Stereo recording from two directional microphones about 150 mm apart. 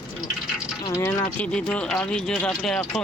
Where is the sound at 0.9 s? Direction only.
15° left (ahead or behind).